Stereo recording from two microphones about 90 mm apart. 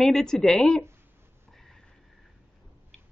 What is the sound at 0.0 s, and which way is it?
Speech, 5° left (ahead or behind).